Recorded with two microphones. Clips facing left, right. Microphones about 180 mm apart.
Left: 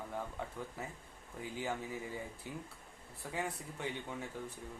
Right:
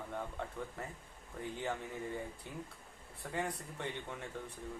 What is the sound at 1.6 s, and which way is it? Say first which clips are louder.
Speech: left 1 dB; 5° left (ahead or behind).